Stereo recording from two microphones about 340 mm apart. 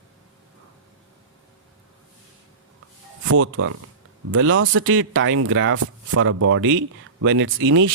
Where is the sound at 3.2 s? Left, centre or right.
Right.